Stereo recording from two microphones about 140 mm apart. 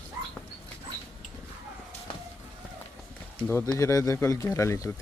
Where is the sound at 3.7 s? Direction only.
25° left (ahead or behind).